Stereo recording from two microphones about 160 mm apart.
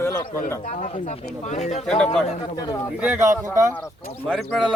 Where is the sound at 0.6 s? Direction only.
50° left (ahead or behind).